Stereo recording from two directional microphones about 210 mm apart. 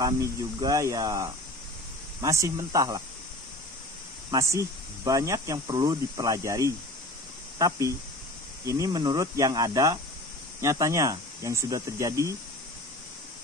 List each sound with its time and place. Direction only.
0.0 s speech: 15° right (ahead or behind)
4.3 s speech: 15° right (ahead or behind)